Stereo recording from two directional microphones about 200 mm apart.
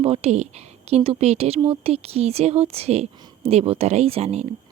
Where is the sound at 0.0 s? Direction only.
30° right (ahead or behind).